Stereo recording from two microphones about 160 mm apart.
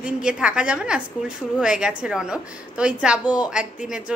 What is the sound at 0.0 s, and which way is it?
A woman's voice, 5° right (ahead or behind).